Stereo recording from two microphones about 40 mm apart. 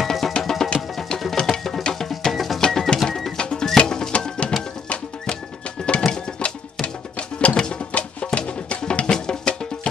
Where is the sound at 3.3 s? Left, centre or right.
Centre.